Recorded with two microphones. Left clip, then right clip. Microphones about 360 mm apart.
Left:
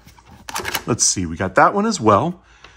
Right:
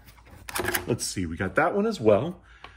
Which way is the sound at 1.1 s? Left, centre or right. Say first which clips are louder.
Left 8 dB; centre.